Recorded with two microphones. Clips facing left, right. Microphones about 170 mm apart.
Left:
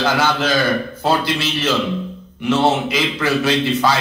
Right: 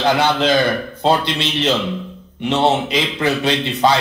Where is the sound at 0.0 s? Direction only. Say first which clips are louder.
Right 2 dB; 20° right (ahead or behind).